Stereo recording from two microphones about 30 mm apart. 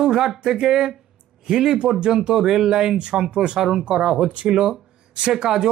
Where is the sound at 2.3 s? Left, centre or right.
Centre.